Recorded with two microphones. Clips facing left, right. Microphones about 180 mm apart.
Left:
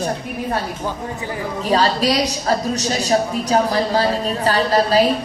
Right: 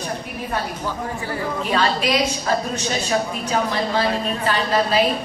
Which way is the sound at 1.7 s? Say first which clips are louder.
Left 4 dB; 35° left (ahead or behind).